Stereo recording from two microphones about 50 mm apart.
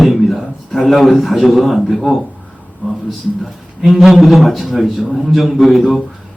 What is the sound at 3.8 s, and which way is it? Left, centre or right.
A man's voice, centre.